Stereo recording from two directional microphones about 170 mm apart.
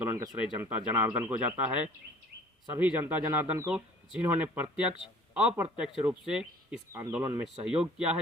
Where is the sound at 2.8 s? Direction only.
10° right (ahead or behind).